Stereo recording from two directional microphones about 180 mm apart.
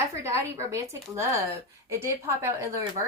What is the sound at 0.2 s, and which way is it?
Speech, 15° right (ahead or behind).